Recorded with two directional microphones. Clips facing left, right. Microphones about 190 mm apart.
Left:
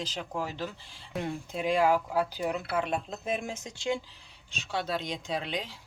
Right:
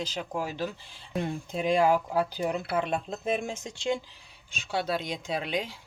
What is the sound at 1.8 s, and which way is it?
Speech, 30° right (ahead or behind).